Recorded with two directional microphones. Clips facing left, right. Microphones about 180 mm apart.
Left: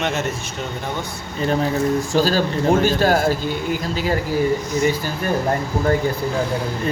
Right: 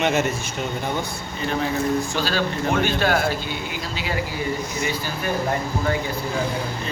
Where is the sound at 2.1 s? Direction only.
40° left (ahead or behind).